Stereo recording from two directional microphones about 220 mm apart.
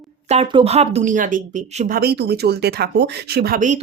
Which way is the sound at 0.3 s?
25° right (ahead or behind).